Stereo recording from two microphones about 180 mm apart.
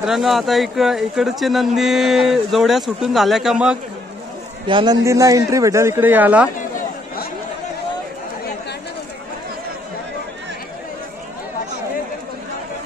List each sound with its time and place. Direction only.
0.0 s speech: centre (ahead or behind)
4.6 s a man's voice: 25° right (ahead or behind); by 6.5 s 10° right (ahead or behind)